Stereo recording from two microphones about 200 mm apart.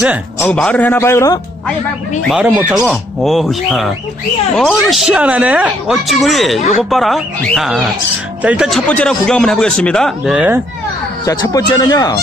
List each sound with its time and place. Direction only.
0.0 s speech: 5° right (ahead or behind)
0.5 s speech: 5° left (ahead or behind)
2.2 s speech: 5° right (ahead or behind)
11.2 s speech: 15° left (ahead or behind)